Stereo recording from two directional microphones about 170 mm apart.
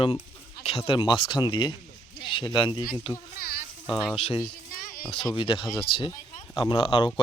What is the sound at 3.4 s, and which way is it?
Sizzle, 65° left (ahead or behind).